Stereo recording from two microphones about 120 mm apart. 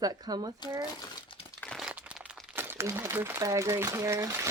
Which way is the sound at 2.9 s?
25° right (ahead or behind).